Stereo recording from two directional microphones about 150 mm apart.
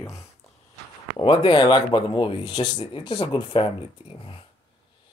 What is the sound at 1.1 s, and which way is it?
Speech, 35° left (ahead or behind).